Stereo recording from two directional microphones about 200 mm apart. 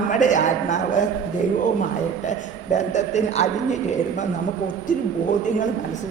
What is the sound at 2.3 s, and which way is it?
A man's voice, 35° left (ahead or behind).